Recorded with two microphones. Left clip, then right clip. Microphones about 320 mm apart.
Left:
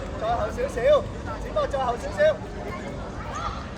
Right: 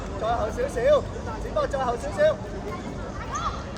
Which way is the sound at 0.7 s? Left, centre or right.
Right.